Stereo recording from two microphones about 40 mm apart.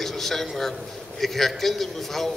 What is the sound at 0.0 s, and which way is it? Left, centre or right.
A man's voice, centre.